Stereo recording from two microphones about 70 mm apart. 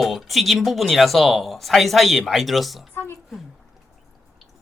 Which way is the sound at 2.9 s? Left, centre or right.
Left.